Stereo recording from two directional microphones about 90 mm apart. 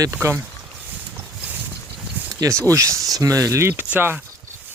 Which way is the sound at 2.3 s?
45° right (ahead or behind).